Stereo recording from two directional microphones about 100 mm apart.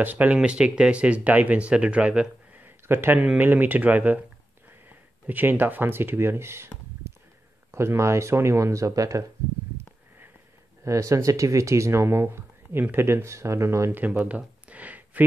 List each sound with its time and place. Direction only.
0.0 s speech: 15° right (ahead or behind)
7.7 s speech: 25° right (ahead or behind)
10.8 s speech: 30° right (ahead or behind); by 15.2 s 15° right (ahead or behind)